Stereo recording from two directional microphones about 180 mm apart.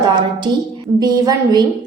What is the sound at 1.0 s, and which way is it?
Speech, 20° right (ahead or behind).